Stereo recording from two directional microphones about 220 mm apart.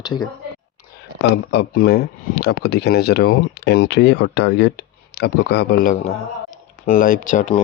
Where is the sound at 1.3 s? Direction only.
50° left (ahead or behind).